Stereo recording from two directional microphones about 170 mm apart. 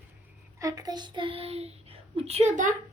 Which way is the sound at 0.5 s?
20° right (ahead or behind).